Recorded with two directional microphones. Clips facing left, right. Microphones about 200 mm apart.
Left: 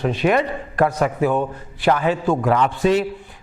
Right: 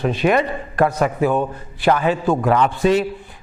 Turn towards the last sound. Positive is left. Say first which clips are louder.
# right 1 dB
turn(degrees=-10)  # may be behind; listen again after turning